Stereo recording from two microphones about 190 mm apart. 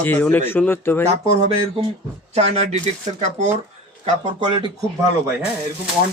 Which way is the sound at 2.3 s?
35° right (ahead or behind).